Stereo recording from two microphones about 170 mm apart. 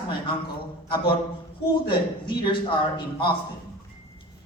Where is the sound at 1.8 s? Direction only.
30° left (ahead or behind).